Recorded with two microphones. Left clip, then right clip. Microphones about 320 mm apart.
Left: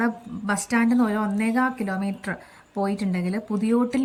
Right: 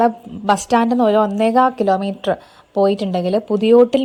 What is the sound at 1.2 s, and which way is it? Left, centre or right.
Speech, centre.